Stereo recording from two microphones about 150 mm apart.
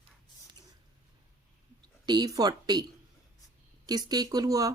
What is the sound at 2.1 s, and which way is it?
Speech, 25° right (ahead or behind).